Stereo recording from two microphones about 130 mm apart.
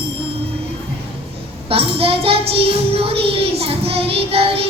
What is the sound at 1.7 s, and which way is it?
Child singing, 45° right (ahead or behind).